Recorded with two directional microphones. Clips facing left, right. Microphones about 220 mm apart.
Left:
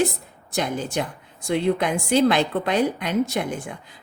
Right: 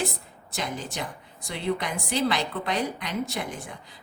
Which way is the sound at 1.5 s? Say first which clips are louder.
Left 8 dB; 50° left (ahead or behind).